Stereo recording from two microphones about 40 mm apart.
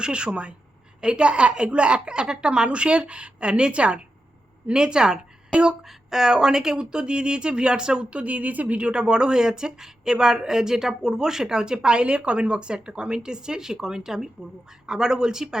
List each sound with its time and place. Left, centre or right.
0.0 s a woman's voice: right
5.8 s a woman's voice: centre
8.2 s speech: right
8.9 s a woman's voice: right